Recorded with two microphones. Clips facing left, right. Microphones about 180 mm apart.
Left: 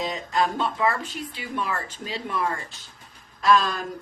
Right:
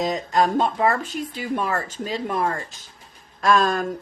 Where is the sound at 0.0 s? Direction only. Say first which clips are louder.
Right 4 dB; 45° right (ahead or behind).